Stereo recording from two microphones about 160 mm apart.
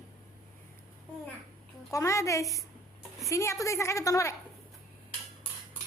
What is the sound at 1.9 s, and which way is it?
A woman's voice, 20° left (ahead or behind).